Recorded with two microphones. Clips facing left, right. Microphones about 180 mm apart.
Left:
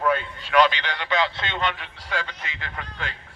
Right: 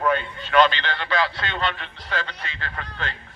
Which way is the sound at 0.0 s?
5° left (ahead or behind).